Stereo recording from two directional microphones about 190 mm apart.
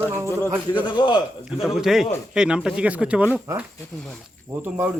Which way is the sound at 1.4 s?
5° right (ahead or behind).